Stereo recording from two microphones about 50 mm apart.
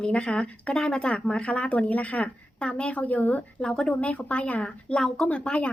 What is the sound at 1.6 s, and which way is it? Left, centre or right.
A woman's voice, left.